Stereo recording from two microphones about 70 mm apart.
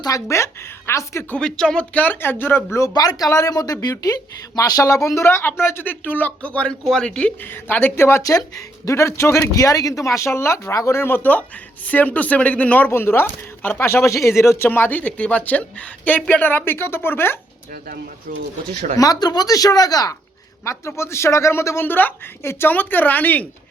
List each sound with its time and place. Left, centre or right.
0.3 s a sound: left
1.4 s a woman's voice: centre; by 2.6 s left
2.9 s speech: left
5.2 s a woman's voice: left; by 7.3 s centre
7.4 s speech: left
8.2 s speech: left
9.5 s a woman's voice: left
12.9 s speech: left
13.8 s speech: left
14.7 s a woman's voice: left
19.2 s speech: left
20.7 s speech: left
21.8 s a woman's voice: left